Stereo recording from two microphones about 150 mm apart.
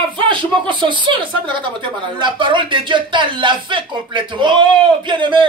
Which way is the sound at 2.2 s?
30° right (ahead or behind).